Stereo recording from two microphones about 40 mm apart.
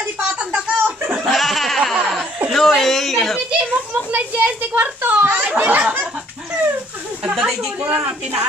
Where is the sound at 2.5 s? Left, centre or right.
Centre.